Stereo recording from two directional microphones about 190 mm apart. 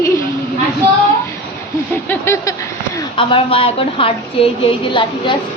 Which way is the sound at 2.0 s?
15° left (ahead or behind).